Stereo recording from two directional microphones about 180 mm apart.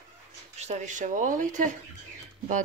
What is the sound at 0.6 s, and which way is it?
Speech, 40° right (ahead or behind).